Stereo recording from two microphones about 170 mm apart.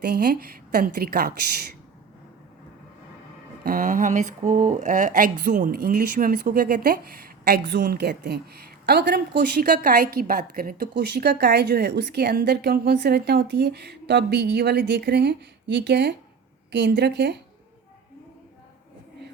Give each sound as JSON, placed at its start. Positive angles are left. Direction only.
{"t": 0.0, "sound": "speech", "side_deg": -70}
{"t": 3.6, "sound": "speech", "side_deg": -55}
{"t": 7.4, "sound": "a woman's voice", "side_deg": -75}
{"t": 9.4, "sound": "a woman's voice", "side_deg": -60}